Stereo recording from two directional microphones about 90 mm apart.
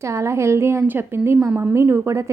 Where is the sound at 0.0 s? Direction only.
30° right (ahead or behind).